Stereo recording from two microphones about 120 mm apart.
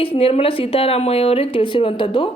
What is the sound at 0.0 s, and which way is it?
Speech, 50° left (ahead or behind).